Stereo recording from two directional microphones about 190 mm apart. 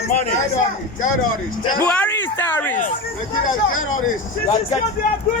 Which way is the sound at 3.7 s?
90° left.